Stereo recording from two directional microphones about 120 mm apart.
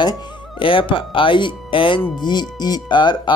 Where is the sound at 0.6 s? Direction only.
45° left (ahead or behind).